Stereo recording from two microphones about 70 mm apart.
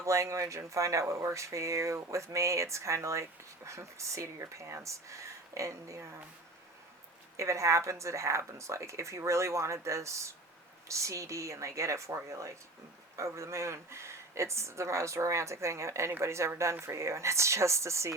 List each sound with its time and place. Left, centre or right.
0.0 s speech: right
7.3 s speech: right